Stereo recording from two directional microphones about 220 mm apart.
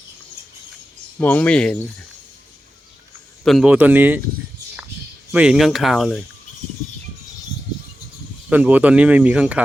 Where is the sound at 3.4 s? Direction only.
Centre (ahead or behind).